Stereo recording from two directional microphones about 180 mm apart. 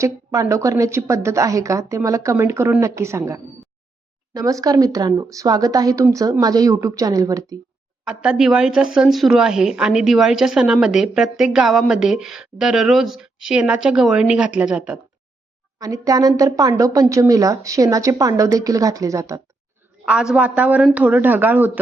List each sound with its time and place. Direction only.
0.0 s a woman's voice: 15° right (ahead or behind)
8.0 s speech: 5° right (ahead or behind)
15.8 s a woman's voice: 20° right (ahead or behind)
20.1 s a woman's voice: 5° right (ahead or behind)